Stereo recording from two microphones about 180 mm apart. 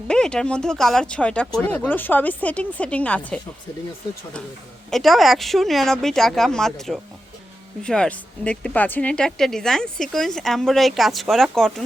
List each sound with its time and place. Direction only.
0.1 s speech: 5° left (ahead or behind)
4.9 s speech: centre (ahead or behind)